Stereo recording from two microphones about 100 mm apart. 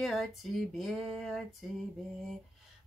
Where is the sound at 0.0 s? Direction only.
Centre (ahead or behind).